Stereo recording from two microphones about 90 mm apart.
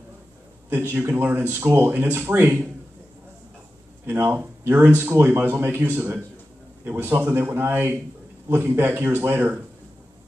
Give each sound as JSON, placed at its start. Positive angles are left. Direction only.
{"t": 0.7, "sound": "speech", "side_deg": -25}
{"t": 4.0, "sound": "speech", "side_deg": -25}